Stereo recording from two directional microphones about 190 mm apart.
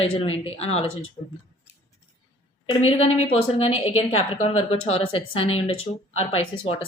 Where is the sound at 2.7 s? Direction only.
30° left (ahead or behind).